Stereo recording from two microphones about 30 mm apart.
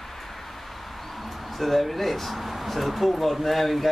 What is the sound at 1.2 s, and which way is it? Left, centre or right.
Speech, centre.